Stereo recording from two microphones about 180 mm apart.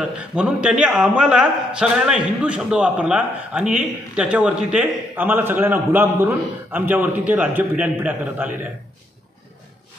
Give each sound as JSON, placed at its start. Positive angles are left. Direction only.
{"t": 0.0, "sound": "a man's voice", "side_deg": -5}